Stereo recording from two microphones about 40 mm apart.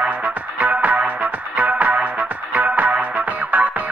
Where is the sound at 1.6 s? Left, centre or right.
Right.